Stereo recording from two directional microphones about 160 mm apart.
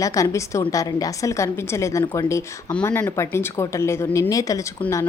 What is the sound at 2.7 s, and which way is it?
A woman's voice, 10° left (ahead or behind).